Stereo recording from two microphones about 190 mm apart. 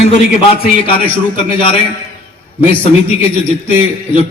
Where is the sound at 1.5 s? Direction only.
25° left (ahead or behind).